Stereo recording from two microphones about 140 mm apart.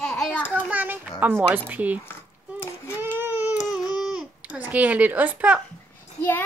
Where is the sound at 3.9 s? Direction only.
5° right (ahead or behind).